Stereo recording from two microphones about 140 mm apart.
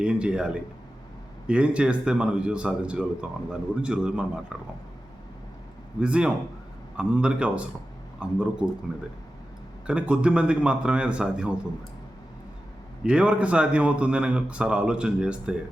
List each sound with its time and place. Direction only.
0.0 s a man's voice: 5° right (ahead or behind)
6.0 s a man's voice: 10° right (ahead or behind)
9.8 s a man's voice: 10° right (ahead or behind)
13.0 s a man's voice: 5° right (ahead or behind)